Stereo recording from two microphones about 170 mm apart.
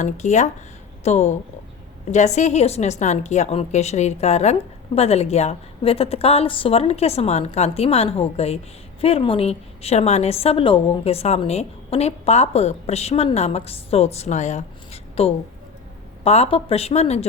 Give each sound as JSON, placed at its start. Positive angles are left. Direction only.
{"t": 0.0, "sound": "a woman's voice", "side_deg": 45}